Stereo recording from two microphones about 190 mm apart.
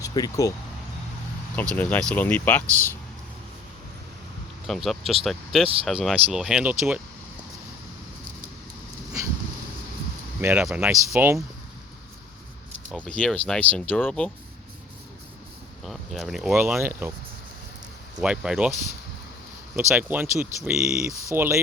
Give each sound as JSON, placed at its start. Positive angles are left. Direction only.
{"t": 0.0, "sound": "speech", "side_deg": 20}
{"t": 1.7, "sound": "speech", "side_deg": 10}
{"t": 4.6, "sound": "speech", "side_deg": 0}
{"t": 10.4, "sound": "speech", "side_deg": -5}
{"t": 13.1, "sound": "speech", "side_deg": 5}
{"t": 15.9, "sound": "speech", "side_deg": 0}
{"t": 18.2, "sound": "speech", "side_deg": -5}
{"t": 19.7, "sound": "speech", "side_deg": -10}
{"t": 21.1, "sound": "speech", "side_deg": -15}